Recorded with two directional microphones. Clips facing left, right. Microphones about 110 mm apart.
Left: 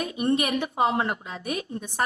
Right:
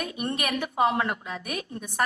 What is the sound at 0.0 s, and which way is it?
A woman's voice, 25° left (ahead or behind).